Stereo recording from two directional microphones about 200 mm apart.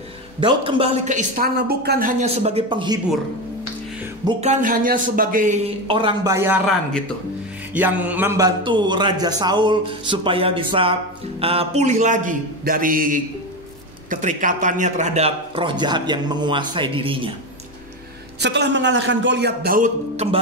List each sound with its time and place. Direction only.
0.4 s a woman's voice: 25° right (ahead or behind)
4.4 s a woman's voice: 40° right (ahead or behind); by 6.6 s 15° right (ahead or behind)
7.7 s a man's voice: 5° right (ahead or behind); by 17.3 s 25° right (ahead or behind)
18.4 s a man's voice: 60° right (ahead or behind); by 20.3 s 35° right (ahead or behind)